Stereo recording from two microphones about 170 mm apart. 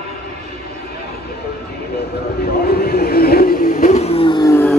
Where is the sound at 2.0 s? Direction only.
65° left (ahead or behind); by 4.5 s 30° left (ahead or behind).